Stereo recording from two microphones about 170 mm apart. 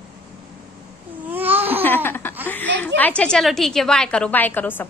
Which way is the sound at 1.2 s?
10° right (ahead or behind).